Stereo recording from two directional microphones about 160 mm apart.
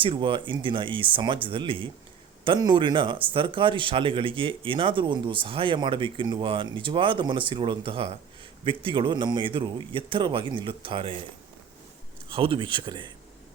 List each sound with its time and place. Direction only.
0.0 s speech: 30° right (ahead or behind)
12.3 s speech: 35° right (ahead or behind)